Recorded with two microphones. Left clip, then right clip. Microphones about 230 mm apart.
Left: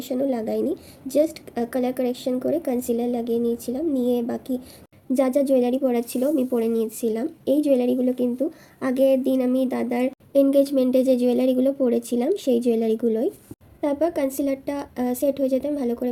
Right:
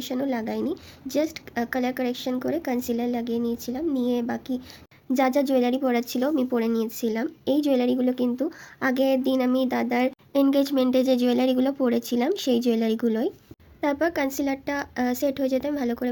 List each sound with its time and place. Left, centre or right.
0.0 s a woman's voice: right